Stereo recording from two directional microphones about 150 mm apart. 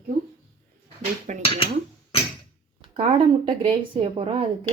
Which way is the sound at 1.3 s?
55° right (ahead or behind).